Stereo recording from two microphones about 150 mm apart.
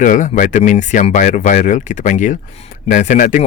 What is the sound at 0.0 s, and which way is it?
Speech, 60° left (ahead or behind).